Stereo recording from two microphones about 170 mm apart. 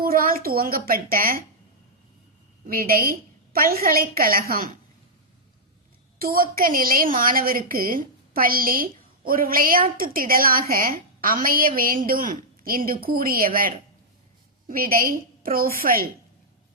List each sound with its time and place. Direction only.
0.0 s a woman's voice: 60° right (ahead or behind)
2.6 s a woman's voice: 60° right (ahead or behind)
6.1 s a woman's voice: 60° right (ahead or behind)